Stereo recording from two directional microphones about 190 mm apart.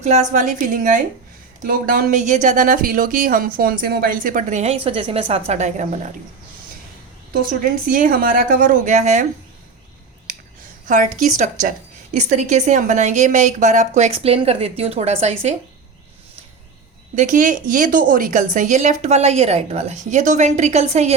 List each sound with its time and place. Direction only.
0.0 s a woman's voice: 35° right (ahead or behind)
7.3 s a woman's voice: 50° right (ahead or behind)
10.8 s a woman's voice: 40° right (ahead or behind)
17.2 s a woman's voice: 40° right (ahead or behind)